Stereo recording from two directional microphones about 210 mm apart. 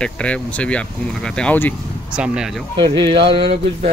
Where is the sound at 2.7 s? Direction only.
20° right (ahead or behind).